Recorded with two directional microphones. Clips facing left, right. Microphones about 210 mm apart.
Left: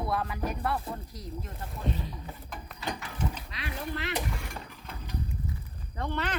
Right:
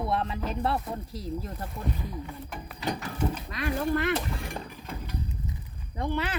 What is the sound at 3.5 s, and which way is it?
Speech, 50° right (ahead or behind).